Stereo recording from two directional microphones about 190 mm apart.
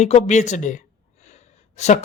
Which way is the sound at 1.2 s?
40° left (ahead or behind).